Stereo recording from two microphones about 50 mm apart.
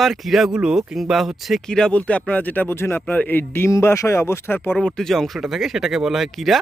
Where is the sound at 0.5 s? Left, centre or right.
Centre.